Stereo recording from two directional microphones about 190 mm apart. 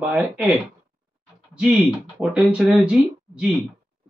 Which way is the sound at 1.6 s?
5° right (ahead or behind).